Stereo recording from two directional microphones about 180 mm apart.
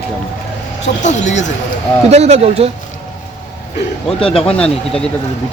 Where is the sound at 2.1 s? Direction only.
35° right (ahead or behind).